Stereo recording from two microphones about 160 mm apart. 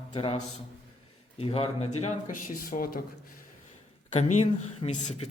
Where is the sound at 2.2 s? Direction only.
60° left (ahead or behind).